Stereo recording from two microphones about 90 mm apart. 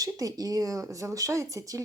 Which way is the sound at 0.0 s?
40° right (ahead or behind).